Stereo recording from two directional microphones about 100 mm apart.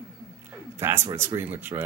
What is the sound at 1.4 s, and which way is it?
Speech, 20° right (ahead or behind).